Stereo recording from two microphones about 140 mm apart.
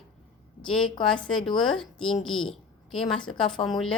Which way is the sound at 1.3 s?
35° left (ahead or behind).